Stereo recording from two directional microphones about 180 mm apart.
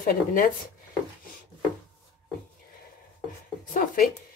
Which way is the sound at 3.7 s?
50° left (ahead or behind).